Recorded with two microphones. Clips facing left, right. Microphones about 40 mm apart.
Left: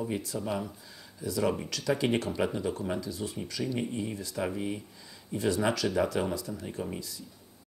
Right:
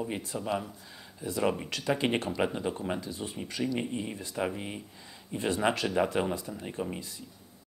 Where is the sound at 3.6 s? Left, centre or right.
Centre.